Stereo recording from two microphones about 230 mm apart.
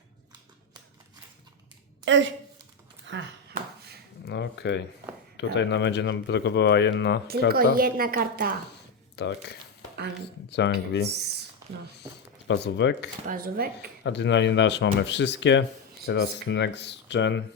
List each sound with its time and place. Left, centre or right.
2.0 s a woman's voice: right
3.1 s a sound: right
4.3 s speech: left
7.3 s a woman's voice: right
9.1 s speech: left
12.5 s speech: left
13.2 s a woman's voice: right
14.0 s speech: left